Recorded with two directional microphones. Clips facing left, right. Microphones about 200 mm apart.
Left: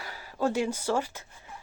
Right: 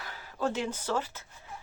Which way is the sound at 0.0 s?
10° left (ahead or behind).